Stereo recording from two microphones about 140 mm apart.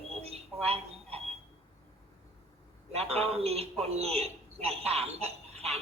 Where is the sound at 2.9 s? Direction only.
45° right (ahead or behind).